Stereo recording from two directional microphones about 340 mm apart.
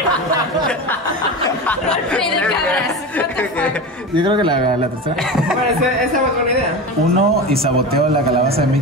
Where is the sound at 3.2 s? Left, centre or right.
Centre.